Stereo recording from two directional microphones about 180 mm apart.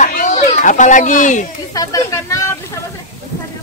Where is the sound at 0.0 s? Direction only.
45° left (ahead or behind).